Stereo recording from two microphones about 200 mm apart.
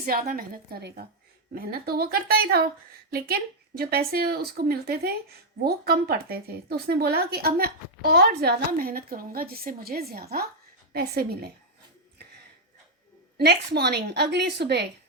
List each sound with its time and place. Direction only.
0.0 s a woman's voice: 50° right (ahead or behind)
13.3 s a woman's voice: 55° right (ahead or behind)